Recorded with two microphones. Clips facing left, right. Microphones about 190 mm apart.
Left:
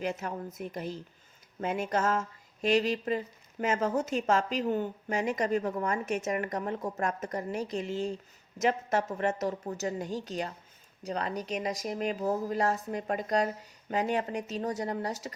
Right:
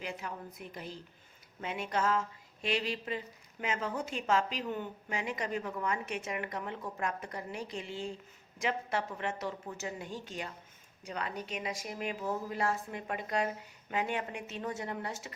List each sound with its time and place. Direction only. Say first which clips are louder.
0.0 s speech: left 7 dB; 45° left (ahead or behind)